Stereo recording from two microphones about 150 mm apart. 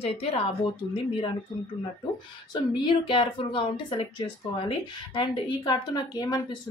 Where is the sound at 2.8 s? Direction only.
35° left (ahead or behind).